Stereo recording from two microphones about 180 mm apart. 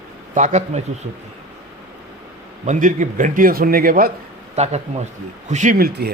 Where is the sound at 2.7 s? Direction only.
45° right (ahead or behind).